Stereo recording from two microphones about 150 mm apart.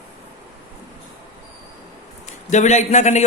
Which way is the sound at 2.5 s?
50° left (ahead or behind).